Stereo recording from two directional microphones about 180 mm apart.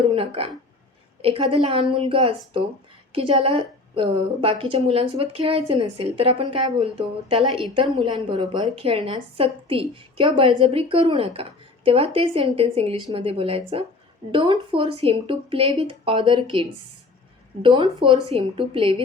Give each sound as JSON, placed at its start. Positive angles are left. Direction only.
{"t": 0.1, "sound": "a woman's voice", "side_deg": -30}
{"t": 17.6, "sound": "a woman's voice", "side_deg": -25}